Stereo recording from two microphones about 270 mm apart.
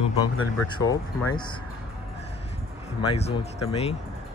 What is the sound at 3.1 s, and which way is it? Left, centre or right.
Speech, left.